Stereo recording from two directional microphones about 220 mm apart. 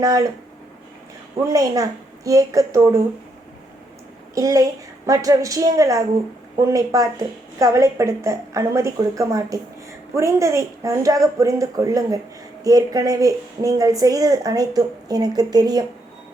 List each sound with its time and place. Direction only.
0.0 s a woman's voice: 15° right (ahead or behind)
1.4 s a woman's voice: 15° right (ahead or behind)
4.4 s a woman's voice: 15° right (ahead or behind)